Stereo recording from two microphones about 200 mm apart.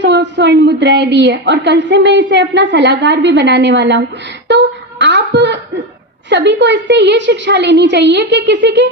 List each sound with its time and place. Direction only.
0.0 s a woman's voice: 60° right (ahead or behind)
4.4 s a sound: 60° right (ahead or behind)
6.3 s a woman's voice: 60° right (ahead or behind)